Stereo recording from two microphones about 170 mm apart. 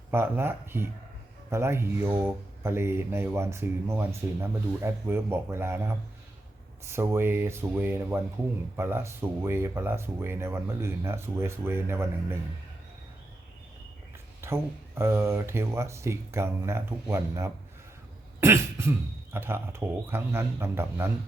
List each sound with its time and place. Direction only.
0.1 s speech: 15° right (ahead or behind)
14.4 s speech: 15° right (ahead or behind)